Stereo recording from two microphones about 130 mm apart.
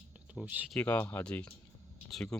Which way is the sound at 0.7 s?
10° left (ahead or behind).